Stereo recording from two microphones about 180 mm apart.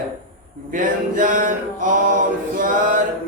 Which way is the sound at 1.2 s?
50° right (ahead or behind).